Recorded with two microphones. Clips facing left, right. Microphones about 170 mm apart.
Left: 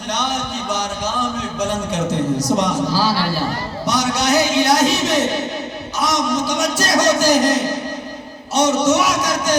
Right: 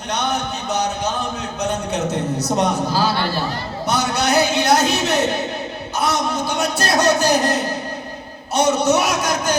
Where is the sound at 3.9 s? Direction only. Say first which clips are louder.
Left 1 dB; 60° right (ahead or behind).